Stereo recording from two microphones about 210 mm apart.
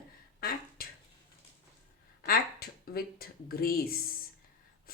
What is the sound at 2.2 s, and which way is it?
A woman's voice, 45° left (ahead or behind).